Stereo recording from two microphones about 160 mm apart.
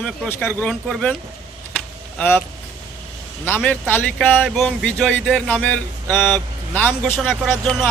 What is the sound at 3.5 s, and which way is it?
Speech, 10° left (ahead or behind).